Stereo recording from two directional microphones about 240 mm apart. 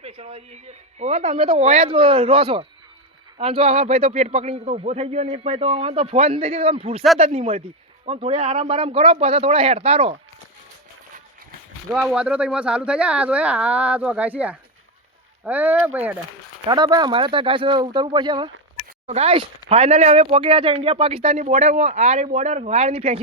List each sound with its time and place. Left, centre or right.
0.0 s speech: right
11.9 s speech: centre
16.6 s speech: centre